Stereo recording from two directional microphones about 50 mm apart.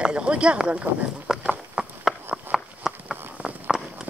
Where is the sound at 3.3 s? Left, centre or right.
Right.